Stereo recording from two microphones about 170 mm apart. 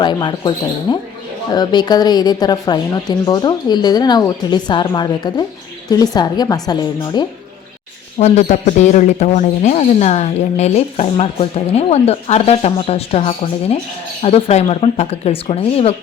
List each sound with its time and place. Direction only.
0.0 s speech: 25° left (ahead or behind)
8.2 s speech: 45° left (ahead or behind)